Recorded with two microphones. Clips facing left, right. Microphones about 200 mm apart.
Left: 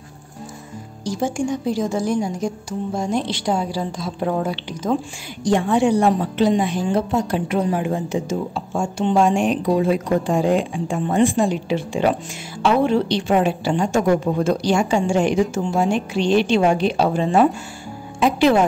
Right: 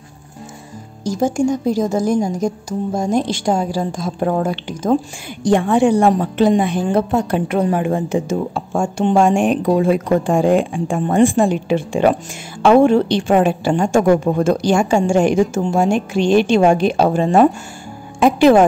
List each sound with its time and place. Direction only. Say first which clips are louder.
1.0 s a woman's voice: right 5 dB; 40° right (ahead or behind)